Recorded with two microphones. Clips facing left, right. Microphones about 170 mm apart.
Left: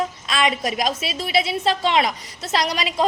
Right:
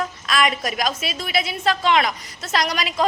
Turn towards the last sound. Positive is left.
turn(degrees=30)  # may be behind; listen again after turning